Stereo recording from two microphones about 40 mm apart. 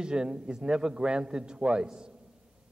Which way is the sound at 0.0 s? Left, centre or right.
Centre.